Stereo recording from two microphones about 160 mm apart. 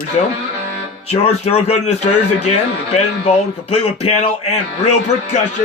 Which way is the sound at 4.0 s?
40° left (ahead or behind).